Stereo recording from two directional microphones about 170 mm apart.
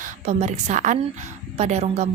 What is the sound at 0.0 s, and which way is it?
A woman's voice, 40° right (ahead or behind).